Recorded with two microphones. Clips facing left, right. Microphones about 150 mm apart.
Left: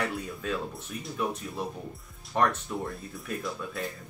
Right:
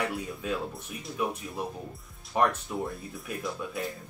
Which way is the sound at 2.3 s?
10° right (ahead or behind).